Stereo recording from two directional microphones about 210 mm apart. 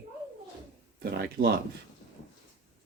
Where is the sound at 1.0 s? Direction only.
50° right (ahead or behind).